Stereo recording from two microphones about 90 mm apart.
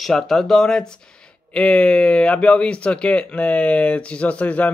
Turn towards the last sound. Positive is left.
turn(degrees=15)  # may be behind; listen again after turning